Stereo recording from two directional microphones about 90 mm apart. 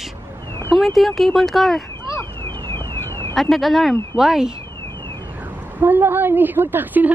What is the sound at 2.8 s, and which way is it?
Car alarm, 30° left (ahead or behind).